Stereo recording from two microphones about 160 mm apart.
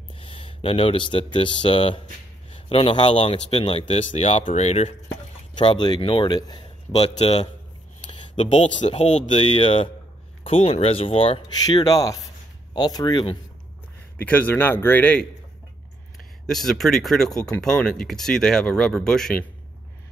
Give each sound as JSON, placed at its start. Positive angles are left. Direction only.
{"t": 0.1, "sound": "a man's voice", "side_deg": 35}
{"t": 3.9, "sound": "speech", "side_deg": 40}
{"t": 5.6, "sound": "speech", "side_deg": 30}
{"t": 6.9, "sound": "a man's voice", "side_deg": 45}
{"t": 11.6, "sound": "speech", "side_deg": 25}
{"t": 14.1, "sound": "a man's voice", "side_deg": 10}
{"t": 16.4, "sound": "speech", "side_deg": 0}